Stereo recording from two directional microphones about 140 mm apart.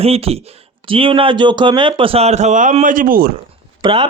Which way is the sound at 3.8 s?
40° right (ahead or behind).